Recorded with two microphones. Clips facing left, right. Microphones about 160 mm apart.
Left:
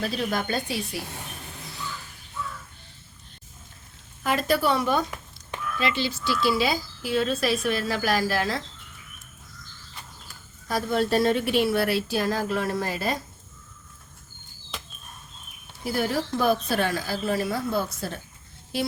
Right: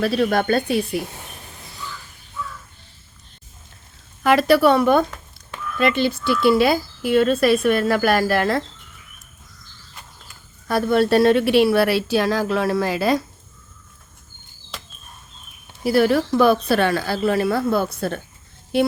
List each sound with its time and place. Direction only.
0.0 s speech: 70° right (ahead or behind)
4.2 s speech: 75° right (ahead or behind); by 8.6 s 55° right (ahead or behind)
10.7 s speech: 65° right (ahead or behind); by 13.2 s 90° right
15.8 s speech: 80° right; by 18.9 s 60° right (ahead or behind)